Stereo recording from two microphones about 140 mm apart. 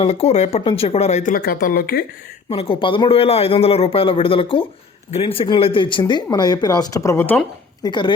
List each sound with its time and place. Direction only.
0.0 s speech: 45° left (ahead or behind)
1.3 s speech: 90° left
2.5 s a man's voice: 40° left (ahead or behind); by 7.4 s 15° left (ahead or behind)
7.8 s a man's voice: 30° left (ahead or behind)